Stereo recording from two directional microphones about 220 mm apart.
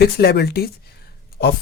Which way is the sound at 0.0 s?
45° left (ahead or behind).